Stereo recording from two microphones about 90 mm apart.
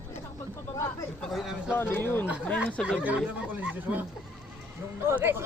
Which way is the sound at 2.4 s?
10° left (ahead or behind).